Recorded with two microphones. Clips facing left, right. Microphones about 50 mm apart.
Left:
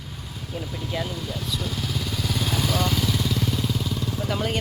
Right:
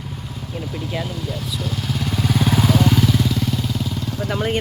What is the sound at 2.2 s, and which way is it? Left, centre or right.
Vehicle, right.